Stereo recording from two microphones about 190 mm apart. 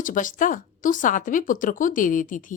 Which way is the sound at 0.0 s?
45° left (ahead or behind).